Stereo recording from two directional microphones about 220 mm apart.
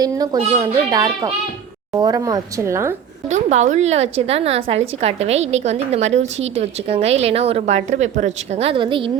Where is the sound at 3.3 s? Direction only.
30° right (ahead or behind).